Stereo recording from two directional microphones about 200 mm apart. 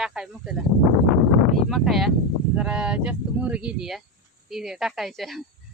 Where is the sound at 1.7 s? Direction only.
Centre (ahead or behind).